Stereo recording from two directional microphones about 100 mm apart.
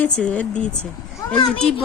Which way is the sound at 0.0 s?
15° left (ahead or behind).